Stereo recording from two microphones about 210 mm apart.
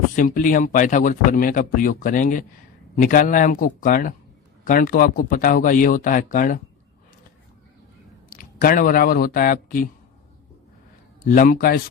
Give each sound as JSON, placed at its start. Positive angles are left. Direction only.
{"t": 0.2, "sound": "speech", "side_deg": 40}
{"t": 8.3, "sound": "speech", "side_deg": 40}
{"t": 11.2, "sound": "speech", "side_deg": 40}